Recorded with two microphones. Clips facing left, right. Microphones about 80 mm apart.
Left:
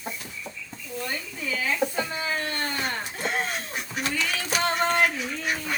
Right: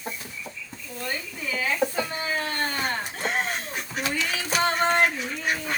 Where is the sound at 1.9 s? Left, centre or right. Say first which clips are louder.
Right 1 dB; right.